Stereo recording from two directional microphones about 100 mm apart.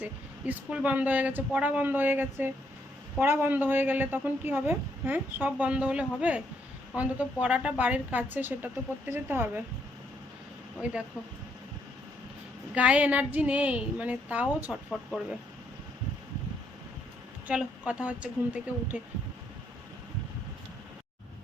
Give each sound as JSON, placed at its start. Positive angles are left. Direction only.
{"t": 0.0, "sound": "a woman's voice", "side_deg": -15}
{"t": 12.7, "sound": "a woman's voice", "side_deg": -15}
{"t": 17.5, "sound": "a woman's voice", "side_deg": -10}